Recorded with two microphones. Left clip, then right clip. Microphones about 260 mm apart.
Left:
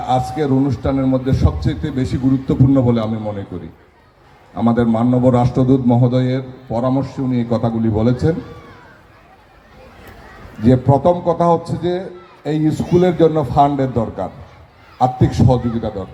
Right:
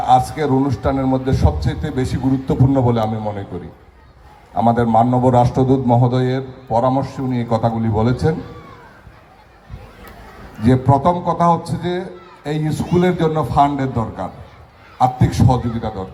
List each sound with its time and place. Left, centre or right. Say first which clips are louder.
0.1 s a man's voice: right 3 dB; right
4.5 s a man's voice: right 3 dB; right
10.6 s a man's voice: left 1 dB; right